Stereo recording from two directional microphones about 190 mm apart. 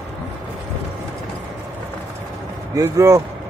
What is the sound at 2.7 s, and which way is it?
Speech, 15° right (ahead or behind).